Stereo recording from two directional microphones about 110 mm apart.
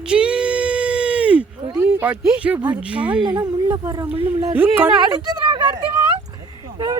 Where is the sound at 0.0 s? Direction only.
10° right (ahead or behind).